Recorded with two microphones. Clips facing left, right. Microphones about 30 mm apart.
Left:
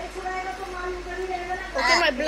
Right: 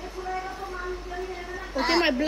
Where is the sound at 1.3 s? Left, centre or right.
Left.